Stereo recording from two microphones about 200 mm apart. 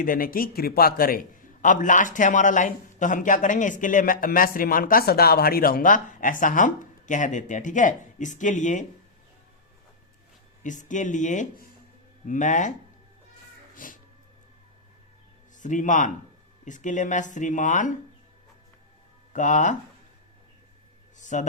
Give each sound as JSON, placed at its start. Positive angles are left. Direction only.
{"t": 0.0, "sound": "a man's voice", "side_deg": 45}
{"t": 10.6, "sound": "speech", "side_deg": 40}
{"t": 13.7, "sound": "music", "side_deg": 45}
{"t": 15.6, "sound": "speech", "side_deg": 40}
{"t": 19.3, "sound": "speech", "side_deg": 40}
{"t": 21.2, "sound": "a sound", "side_deg": 40}